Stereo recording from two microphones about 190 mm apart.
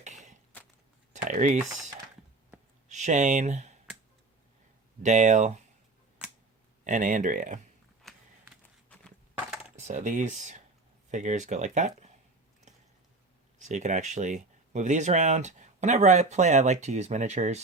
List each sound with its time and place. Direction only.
0.0 s a sound: 40° right (ahead or behind)
1.1 s speech: 40° right (ahead or behind)
2.9 s speech: 40° right (ahead or behind)
5.0 s speech: 40° right (ahead or behind)
6.8 s speech: 40° right (ahead or behind)
8.0 s a sound: 5° left (ahead or behind)
9.7 s speech: 40° right (ahead or behind)
13.6 s speech: 40° right (ahead or behind)